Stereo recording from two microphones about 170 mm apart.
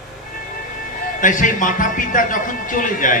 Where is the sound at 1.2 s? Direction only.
50° left (ahead or behind).